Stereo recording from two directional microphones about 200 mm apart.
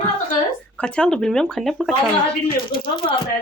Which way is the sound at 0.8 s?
5° left (ahead or behind).